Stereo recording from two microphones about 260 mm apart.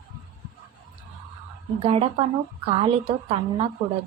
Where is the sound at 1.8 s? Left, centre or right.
Right.